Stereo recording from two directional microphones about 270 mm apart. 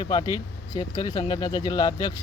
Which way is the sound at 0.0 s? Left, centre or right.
Centre.